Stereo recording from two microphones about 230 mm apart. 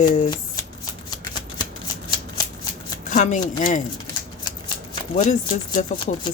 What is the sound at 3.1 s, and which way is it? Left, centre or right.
Speech, left.